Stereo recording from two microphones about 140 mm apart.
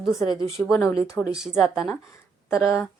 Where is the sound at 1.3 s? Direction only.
5° right (ahead or behind).